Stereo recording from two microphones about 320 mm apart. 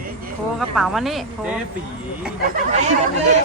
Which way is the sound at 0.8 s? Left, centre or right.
Centre.